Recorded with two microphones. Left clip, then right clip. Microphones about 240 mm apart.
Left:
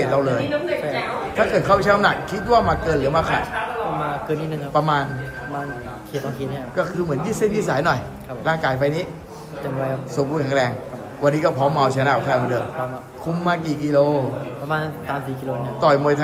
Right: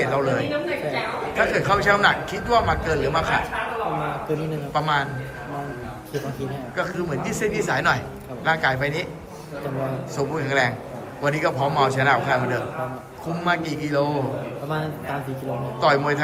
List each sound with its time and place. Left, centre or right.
0.0 s a woman's voice: centre
4.7 s a man's voice: centre
6.7 s a man's voice: centre
10.2 s a man's voice: centre
14.7 s a man's voice: centre
15.8 s a man's voice: centre